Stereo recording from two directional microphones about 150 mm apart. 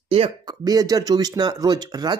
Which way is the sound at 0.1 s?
40° right (ahead or behind).